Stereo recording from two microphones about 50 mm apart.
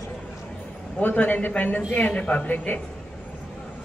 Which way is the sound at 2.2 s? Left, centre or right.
Left.